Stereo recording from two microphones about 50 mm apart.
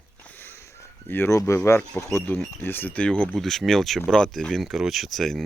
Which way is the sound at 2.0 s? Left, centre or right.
Left.